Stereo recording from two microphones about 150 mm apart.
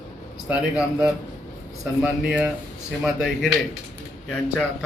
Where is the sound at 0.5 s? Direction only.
10° right (ahead or behind).